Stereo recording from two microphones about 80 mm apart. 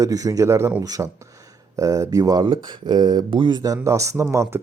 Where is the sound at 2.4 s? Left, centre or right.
Right.